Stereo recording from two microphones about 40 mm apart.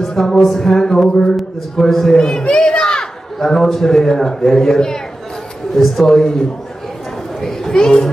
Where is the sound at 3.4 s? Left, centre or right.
Centre.